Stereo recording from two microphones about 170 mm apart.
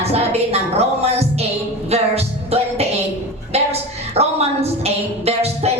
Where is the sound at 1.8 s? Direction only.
35° right (ahead or behind).